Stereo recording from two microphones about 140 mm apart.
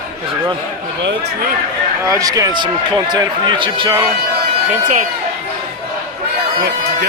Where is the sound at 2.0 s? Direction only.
25° right (ahead or behind).